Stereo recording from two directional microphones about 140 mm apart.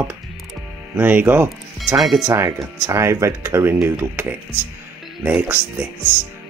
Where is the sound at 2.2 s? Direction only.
20° right (ahead or behind).